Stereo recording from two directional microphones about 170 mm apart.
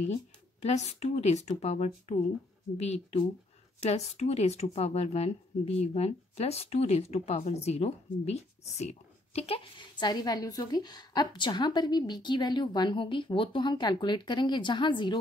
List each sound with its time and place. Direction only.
0.6 s speech: 40° left (ahead or behind)